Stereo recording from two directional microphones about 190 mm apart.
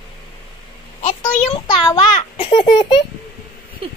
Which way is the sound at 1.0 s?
25° left (ahead or behind).